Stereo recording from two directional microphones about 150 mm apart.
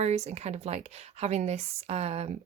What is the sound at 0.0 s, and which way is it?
Speech, 45° right (ahead or behind).